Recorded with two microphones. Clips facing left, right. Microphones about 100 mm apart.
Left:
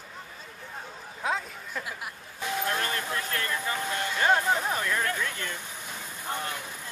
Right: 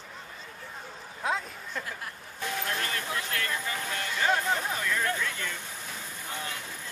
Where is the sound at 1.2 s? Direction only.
5° left (ahead or behind).